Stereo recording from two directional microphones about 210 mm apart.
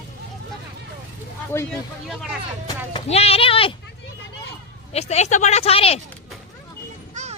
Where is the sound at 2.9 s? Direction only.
25° left (ahead or behind).